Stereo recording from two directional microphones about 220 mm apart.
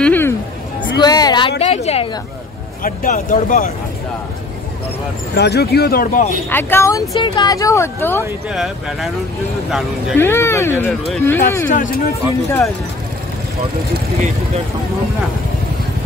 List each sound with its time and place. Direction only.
0.0 s a sound: 10° left (ahead or behind)
1.6 s a woman's voice: 30° left (ahead or behind)
5.3 s speech: 50° left (ahead or behind)
6.5 s speech: 10° left (ahead or behind)
8.2 s speech: centre (ahead or behind)
10.1 s speech: 10° left (ahead or behind)
11.7 s speech: 35° left (ahead or behind)